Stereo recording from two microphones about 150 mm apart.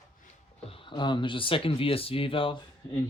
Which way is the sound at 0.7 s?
35° left (ahead or behind).